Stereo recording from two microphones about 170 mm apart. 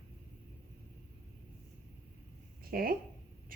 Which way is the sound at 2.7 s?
60° right (ahead or behind).